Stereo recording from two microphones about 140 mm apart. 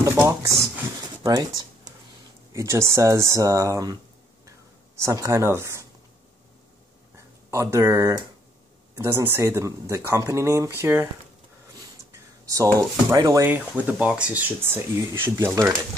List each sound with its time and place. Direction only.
0.0 s speech: 20° right (ahead or behind)
4.5 s a sound: 25° right (ahead or behind)
7.5 s speech: 20° right (ahead or behind)
12.1 s speech: 20° right (ahead or behind)